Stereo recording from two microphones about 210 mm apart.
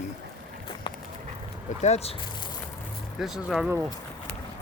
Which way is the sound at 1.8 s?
30° left (ahead or behind).